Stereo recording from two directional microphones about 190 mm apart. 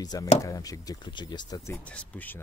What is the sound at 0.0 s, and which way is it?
Speech, 20° left (ahead or behind).